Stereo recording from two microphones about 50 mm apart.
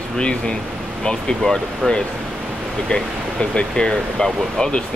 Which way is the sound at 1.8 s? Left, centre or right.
Centre.